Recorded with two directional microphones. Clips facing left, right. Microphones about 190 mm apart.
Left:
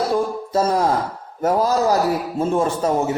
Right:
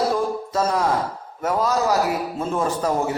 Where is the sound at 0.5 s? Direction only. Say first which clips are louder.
Left 4 dB; 35° left (ahead or behind).